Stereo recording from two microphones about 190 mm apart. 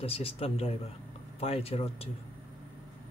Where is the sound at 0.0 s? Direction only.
30° left (ahead or behind).